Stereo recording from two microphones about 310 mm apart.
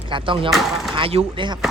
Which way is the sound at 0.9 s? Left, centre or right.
Centre.